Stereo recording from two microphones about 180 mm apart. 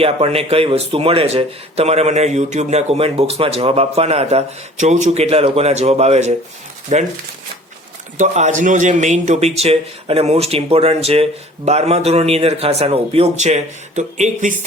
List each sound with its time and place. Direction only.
0.0 s speech: 35° right (ahead or behind)
8.2 s speech: 45° right (ahead or behind)